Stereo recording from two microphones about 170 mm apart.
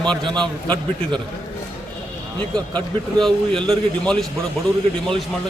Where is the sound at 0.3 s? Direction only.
5° left (ahead or behind).